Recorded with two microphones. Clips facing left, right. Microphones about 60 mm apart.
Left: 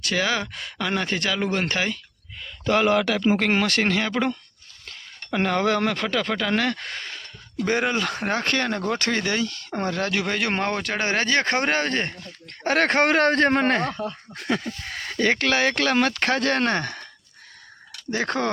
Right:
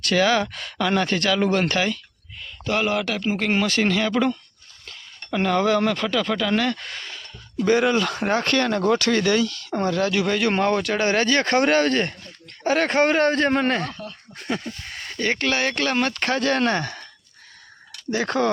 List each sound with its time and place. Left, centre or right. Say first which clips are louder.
0.0 s speech: right 5 dB; centre; by 2.0 s left
3.6 s speech: right 1 dB; left
8.4 s speech: right 4 dB; left
9.8 s speech: right 4 dB; left
12.5 s speech: even; left
14.3 s speech: left 1 dB; left
14.9 s speech: left 3 dB; left
18.1 s speech: right 3 dB; left